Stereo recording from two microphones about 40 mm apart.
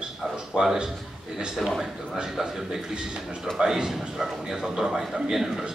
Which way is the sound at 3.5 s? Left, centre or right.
Centre.